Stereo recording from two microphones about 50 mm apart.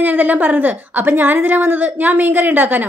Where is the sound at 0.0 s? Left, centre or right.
Right.